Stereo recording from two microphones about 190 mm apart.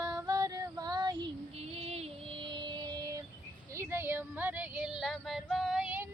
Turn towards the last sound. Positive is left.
turn(degrees=-5)  # may be behind; listen again after turning